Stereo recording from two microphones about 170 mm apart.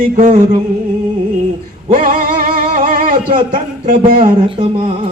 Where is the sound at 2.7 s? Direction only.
55° right (ahead or behind).